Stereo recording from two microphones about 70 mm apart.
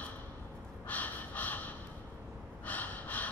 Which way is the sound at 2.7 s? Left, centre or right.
Left.